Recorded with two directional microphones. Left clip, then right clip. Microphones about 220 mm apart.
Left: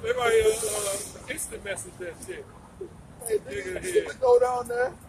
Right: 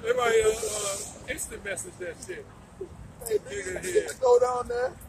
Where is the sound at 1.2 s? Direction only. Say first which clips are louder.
Even; centre (ahead or behind).